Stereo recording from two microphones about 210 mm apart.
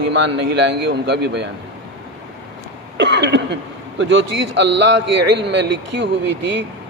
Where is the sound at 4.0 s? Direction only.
60° right (ahead or behind).